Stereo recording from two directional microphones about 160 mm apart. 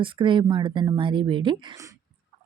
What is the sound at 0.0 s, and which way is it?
Speech, 30° right (ahead or behind).